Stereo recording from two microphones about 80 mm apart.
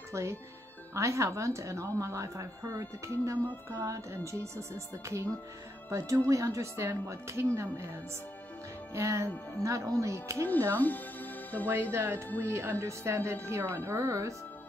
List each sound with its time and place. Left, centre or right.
0.1 s a woman's voice: right
8.9 s a woman's voice: right
10.7 s speech: left
11.9 s a woman's voice: right